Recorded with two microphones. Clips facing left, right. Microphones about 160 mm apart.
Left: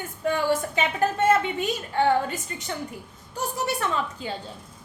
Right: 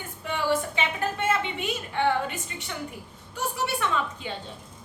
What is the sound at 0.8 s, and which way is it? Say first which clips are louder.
A woman's voice: left 5 dB; 40° left (ahead or behind).